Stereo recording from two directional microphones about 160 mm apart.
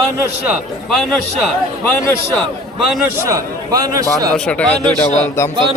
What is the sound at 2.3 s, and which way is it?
Speech, centre (ahead or behind).